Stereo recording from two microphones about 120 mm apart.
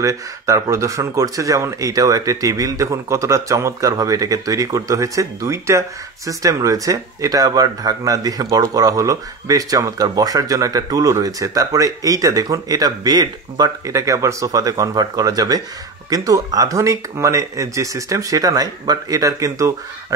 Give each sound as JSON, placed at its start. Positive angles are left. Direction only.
{"t": 0.0, "sound": "speech", "side_deg": -25}